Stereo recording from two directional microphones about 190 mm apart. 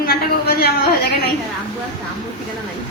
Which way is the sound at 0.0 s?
55° left (ahead or behind).